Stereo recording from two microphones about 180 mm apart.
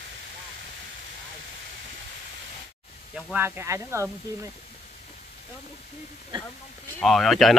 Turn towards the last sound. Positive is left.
turn(degrees=0)  # may be behind; listen again after turning